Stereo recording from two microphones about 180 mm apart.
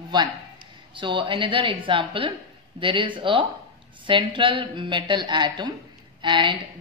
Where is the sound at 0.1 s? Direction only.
25° right (ahead or behind).